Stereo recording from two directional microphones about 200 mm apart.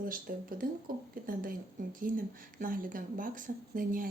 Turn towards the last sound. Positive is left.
turn(degrees=-45)  # may be behind; listen again after turning